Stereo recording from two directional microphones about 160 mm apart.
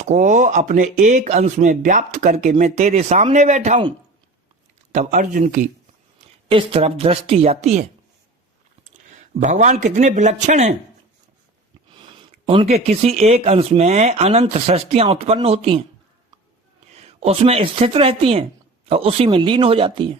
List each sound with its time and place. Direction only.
0.0 s speech: 50° right (ahead or behind)
4.9 s speech: 50° right (ahead or behind)
6.1 s a woman's voice: 35° right (ahead or behind)
11.9 s speech: 35° right (ahead or behind)
16.9 s speech: 40° right (ahead or behind)